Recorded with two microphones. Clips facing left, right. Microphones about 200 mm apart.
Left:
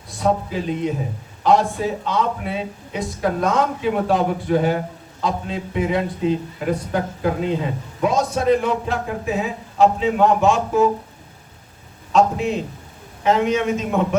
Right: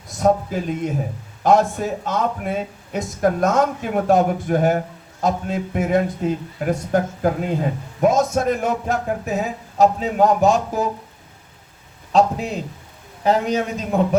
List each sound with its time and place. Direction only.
0.1 s a man's voice: 45° right (ahead or behind)
12.1 s a man's voice: 35° right (ahead or behind)